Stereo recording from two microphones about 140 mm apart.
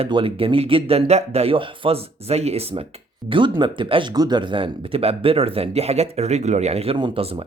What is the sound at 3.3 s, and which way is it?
Speech, 35° right (ahead or behind).